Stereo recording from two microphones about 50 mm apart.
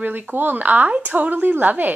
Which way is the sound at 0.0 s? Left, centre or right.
Right.